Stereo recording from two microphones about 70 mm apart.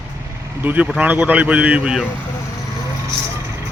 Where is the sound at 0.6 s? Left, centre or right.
Right.